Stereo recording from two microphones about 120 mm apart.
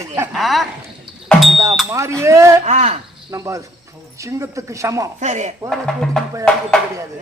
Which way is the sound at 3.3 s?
25° right (ahead or behind).